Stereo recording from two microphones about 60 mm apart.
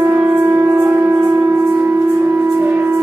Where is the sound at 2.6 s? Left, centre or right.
Right.